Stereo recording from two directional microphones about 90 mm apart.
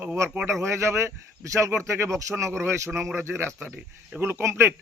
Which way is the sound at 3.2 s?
25° right (ahead or behind).